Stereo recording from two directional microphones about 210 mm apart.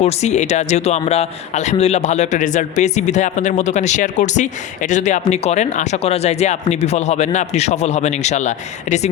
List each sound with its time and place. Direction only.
0.0 s speech: 30° left (ahead or behind)